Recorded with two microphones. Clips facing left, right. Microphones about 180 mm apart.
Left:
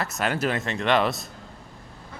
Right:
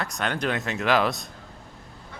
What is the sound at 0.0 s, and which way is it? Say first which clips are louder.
Speech: left 2 dB; 5° left (ahead or behind).